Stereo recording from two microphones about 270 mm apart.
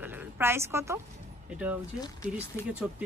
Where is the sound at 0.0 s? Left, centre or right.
Centre.